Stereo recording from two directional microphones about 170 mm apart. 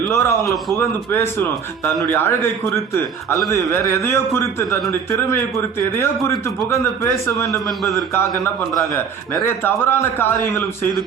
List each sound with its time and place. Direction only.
0.1 s a man's voice: 15° left (ahead or behind)
6.7 s a man's voice: 15° left (ahead or behind)
9.5 s a man's voice: 15° left (ahead or behind)